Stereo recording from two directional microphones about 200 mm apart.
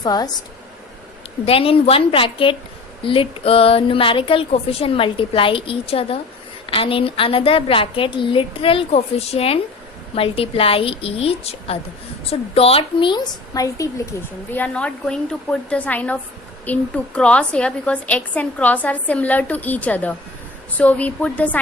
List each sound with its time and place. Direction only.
0.0 s speech: 20° left (ahead or behind)
1.5 s speech: 30° left (ahead or behind)
14.5 s a woman's voice: 5° left (ahead or behind)